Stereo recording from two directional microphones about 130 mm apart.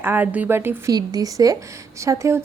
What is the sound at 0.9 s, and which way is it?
A woman's voice, 30° right (ahead or behind).